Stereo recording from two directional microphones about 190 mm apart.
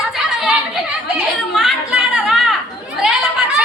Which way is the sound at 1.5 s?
Centre (ahead or behind).